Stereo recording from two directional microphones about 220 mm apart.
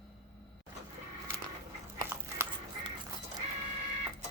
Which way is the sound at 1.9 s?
15° right (ahead or behind).